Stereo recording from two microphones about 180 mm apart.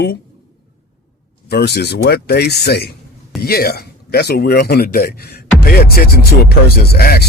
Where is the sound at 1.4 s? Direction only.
65° left (ahead or behind).